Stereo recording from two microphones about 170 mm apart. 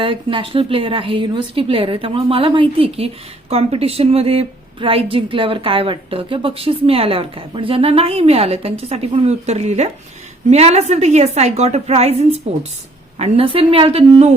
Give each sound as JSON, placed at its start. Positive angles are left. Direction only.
{"t": 0.0, "sound": "a woman's voice", "side_deg": -30}